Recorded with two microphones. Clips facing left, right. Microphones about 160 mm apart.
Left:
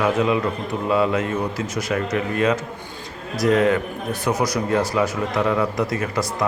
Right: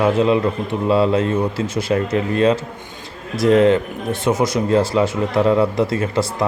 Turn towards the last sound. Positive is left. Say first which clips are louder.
# right 4 dB
turn(degrees=-30)  # may be behind; listen again after turning